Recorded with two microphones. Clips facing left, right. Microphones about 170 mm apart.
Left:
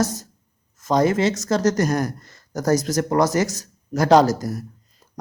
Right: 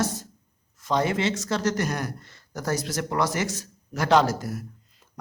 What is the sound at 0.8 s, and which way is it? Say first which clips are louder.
Speech: left 6 dB; 40° left (ahead or behind).